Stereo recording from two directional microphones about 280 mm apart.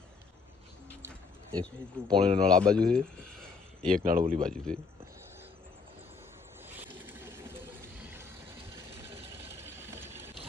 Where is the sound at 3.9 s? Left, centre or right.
Right.